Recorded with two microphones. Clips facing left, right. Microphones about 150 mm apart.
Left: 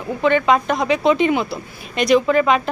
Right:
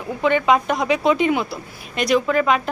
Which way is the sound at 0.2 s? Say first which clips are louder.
Left 1 dB; 10° right (ahead or behind).